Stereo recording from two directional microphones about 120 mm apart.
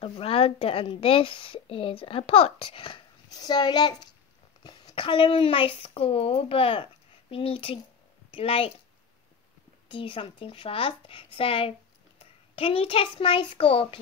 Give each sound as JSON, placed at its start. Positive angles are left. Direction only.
{"t": 0.0, "sound": "a woman's voice", "side_deg": 55}
{"t": 3.3, "sound": "a child's voice", "side_deg": 35}
{"t": 9.8, "sound": "a woman's voice", "side_deg": 45}